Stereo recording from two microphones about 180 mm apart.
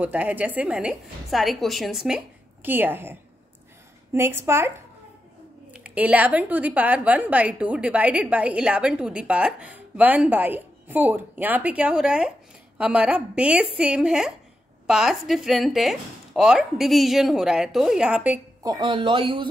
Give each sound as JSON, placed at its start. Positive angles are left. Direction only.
{"t": 0.0, "sound": "a woman's voice", "side_deg": -10}
{"t": 18.6, "sound": "speech", "side_deg": -25}